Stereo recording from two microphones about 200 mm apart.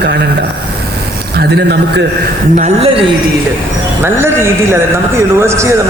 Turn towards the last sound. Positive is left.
turn(degrees=-15)  # may be behind; listen again after turning